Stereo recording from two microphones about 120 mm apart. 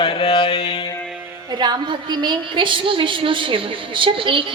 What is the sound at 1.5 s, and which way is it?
A woman's voice, 35° right (ahead or behind).